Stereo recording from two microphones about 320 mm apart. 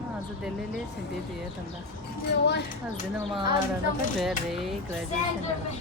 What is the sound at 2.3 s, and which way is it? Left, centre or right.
Speech, left.